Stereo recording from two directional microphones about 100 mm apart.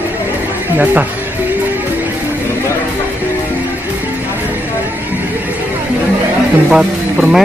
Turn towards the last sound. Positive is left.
turn(degrees=-5)  # may be behind; listen again after turning